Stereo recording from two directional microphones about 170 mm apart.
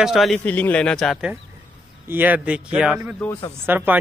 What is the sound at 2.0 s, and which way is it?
Speech, 10° right (ahead or behind).